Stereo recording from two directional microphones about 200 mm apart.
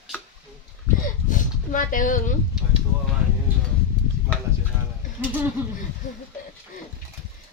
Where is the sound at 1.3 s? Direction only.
40° left (ahead or behind).